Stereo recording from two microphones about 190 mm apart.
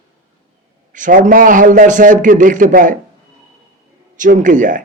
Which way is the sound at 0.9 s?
45° right (ahead or behind).